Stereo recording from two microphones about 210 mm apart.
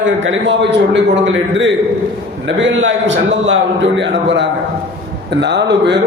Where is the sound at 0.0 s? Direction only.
60° right (ahead or behind).